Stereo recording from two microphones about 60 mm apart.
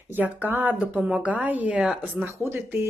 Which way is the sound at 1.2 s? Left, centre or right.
Right.